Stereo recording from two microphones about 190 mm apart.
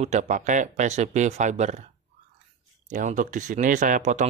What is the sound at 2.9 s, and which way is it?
Speech, 40° right (ahead or behind).